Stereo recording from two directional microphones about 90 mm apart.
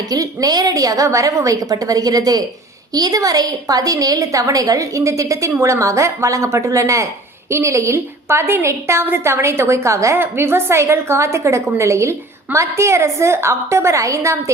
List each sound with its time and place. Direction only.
0.1 s a woman's voice: 40° right (ahead or behind)